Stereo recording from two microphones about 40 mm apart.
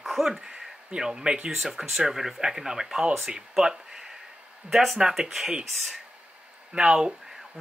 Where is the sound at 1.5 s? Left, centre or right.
Centre.